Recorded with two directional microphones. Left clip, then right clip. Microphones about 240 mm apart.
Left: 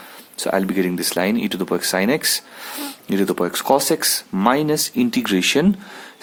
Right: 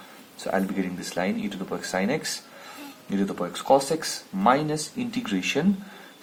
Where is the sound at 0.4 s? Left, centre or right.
Left.